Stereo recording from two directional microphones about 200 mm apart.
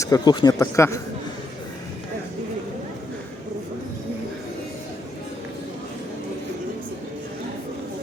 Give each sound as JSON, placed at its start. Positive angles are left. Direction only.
{"t": 0.0, "sound": "a man's voice", "side_deg": 20}